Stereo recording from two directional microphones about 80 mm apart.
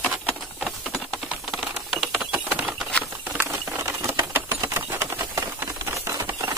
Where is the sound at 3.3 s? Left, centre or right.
Right.